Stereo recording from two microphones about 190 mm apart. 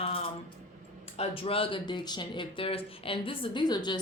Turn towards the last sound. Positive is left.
turn(degrees=20)  # may be behind; listen again after turning